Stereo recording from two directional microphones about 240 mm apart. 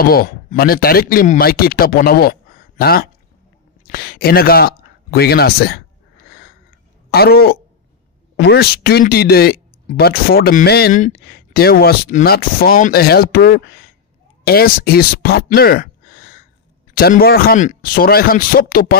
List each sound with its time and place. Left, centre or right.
0.1 s speech: left
7.1 s speech: left